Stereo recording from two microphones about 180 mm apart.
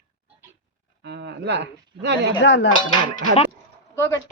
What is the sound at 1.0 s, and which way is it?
A woman's voice, 65° right (ahead or behind).